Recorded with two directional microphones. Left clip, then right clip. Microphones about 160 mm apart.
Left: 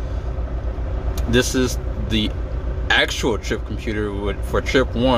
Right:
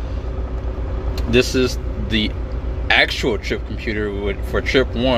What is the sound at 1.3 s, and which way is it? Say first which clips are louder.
Speech: right 2 dB; 15° left (ahead or behind).